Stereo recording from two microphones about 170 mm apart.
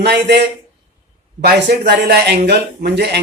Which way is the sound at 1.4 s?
70° right (ahead or behind).